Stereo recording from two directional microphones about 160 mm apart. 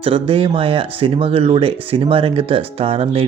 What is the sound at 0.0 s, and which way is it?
Speech, 35° right (ahead or behind).